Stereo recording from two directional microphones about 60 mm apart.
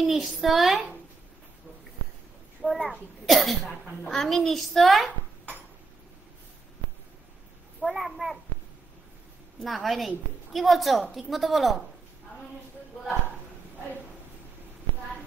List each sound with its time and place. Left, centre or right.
0.0 s a woman's voice: centre
2.6 s a child's voice: centre
7.8 s a woman's voice: centre
9.6 s a woman's voice: centre